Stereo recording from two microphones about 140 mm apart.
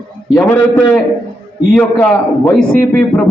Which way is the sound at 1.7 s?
10° left (ahead or behind).